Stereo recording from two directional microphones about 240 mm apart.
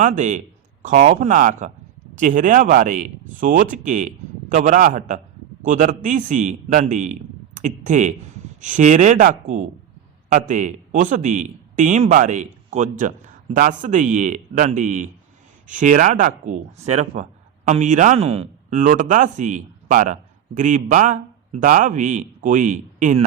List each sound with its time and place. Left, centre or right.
0.0 s a man's voice: right